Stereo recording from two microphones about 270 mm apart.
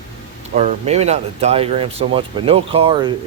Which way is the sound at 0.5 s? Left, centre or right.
Right.